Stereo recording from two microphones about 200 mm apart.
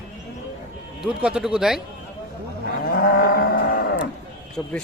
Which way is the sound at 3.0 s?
50° left (ahead or behind).